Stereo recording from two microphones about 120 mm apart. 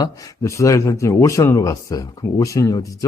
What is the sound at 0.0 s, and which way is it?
Speech, 30° left (ahead or behind).